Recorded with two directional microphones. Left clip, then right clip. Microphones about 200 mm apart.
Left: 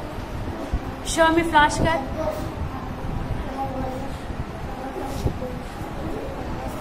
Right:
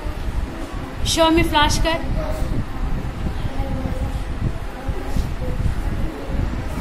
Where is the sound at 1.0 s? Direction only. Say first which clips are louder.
Right 2 dB; 25° right (ahead or behind).